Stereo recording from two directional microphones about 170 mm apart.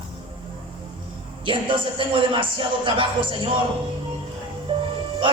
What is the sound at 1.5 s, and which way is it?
A man's voice, 30° right (ahead or behind).